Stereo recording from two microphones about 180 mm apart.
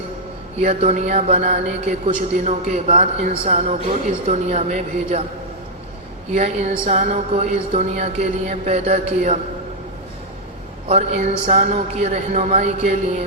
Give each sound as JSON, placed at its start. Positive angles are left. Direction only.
{"t": 0.6, "sound": "a man's voice", "side_deg": -35}
{"t": 6.3, "sound": "a man's voice", "side_deg": -35}
{"t": 10.8, "sound": "a man's voice", "side_deg": -35}